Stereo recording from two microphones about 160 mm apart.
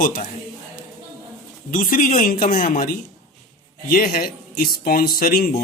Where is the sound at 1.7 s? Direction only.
60° left (ahead or behind).